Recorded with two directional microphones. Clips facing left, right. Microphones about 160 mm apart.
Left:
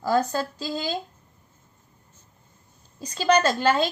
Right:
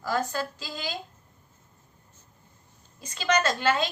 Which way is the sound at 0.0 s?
35° left (ahead or behind).